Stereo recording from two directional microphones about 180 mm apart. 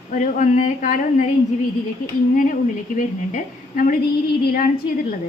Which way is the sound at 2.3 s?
50° left (ahead or behind).